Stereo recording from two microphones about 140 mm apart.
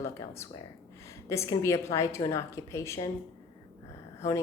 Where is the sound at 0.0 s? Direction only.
20° left (ahead or behind).